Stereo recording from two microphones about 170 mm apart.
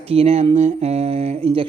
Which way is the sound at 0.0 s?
35° right (ahead or behind).